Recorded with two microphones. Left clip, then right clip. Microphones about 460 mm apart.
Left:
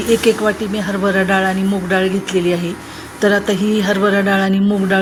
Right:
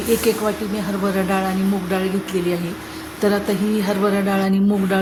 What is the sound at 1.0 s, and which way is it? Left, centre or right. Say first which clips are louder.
Speech: left 7 dB; right.